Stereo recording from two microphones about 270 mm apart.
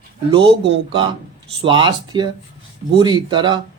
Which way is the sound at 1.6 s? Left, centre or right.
Centre.